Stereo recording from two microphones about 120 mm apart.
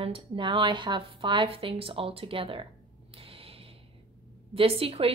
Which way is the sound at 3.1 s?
50° right (ahead or behind).